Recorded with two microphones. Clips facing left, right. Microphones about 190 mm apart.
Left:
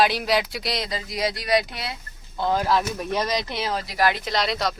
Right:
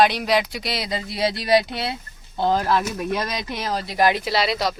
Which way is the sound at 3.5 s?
45° right (ahead or behind).